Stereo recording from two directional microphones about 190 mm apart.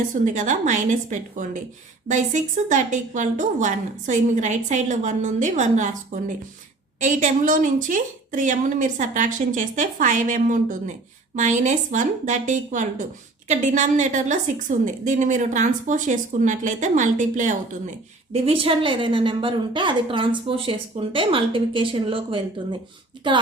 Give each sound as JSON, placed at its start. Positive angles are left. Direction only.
{"t": 0.1, "sound": "a woman's voice", "side_deg": -40}
{"t": 18.4, "sound": "a woman's voice", "side_deg": -30}